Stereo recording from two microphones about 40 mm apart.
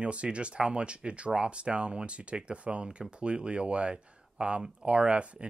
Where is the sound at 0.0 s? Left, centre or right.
Right.